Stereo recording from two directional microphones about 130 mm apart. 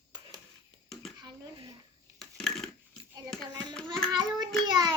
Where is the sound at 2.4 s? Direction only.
Centre (ahead or behind).